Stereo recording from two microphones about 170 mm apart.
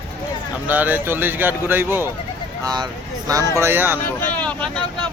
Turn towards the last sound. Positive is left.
turn(degrees=5)  # may be behind; listen again after turning